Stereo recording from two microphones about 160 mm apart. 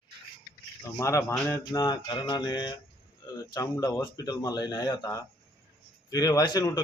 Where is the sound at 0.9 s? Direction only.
20° left (ahead or behind).